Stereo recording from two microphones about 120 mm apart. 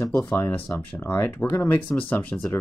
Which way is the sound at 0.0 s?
20° left (ahead or behind).